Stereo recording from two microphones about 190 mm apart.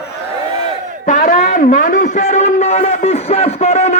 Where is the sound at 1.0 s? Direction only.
40° left (ahead or behind).